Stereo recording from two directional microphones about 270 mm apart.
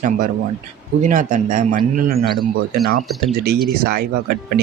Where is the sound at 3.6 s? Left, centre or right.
Right.